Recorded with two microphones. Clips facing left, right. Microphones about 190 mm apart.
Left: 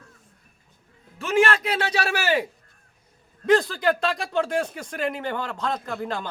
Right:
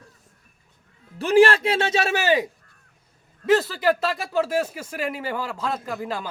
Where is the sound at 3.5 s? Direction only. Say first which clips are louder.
Even; 5° right (ahead or behind).